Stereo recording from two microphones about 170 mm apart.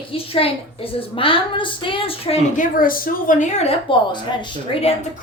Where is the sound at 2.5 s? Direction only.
55° left (ahead or behind); by 4.9 s 30° left (ahead or behind).